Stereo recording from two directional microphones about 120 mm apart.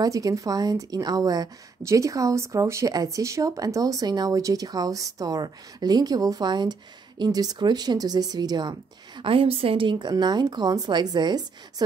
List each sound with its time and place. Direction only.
0.0 s speech: 30° right (ahead or behind)